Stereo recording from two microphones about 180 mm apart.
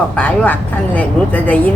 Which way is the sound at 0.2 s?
10° left (ahead or behind).